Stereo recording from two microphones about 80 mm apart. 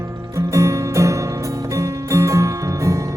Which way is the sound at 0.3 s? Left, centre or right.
Right.